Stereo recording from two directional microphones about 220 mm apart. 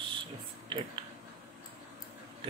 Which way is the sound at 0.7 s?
20° right (ahead or behind).